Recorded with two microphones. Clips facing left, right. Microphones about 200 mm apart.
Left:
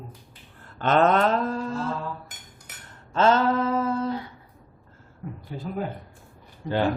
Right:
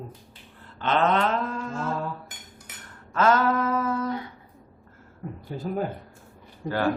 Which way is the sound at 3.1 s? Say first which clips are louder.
Left 1 dB; 30° left (ahead or behind).